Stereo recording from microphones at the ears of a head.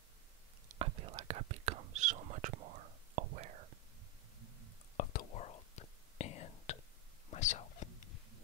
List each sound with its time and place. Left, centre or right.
0.7 s whispering: right
4.9 s whispering: left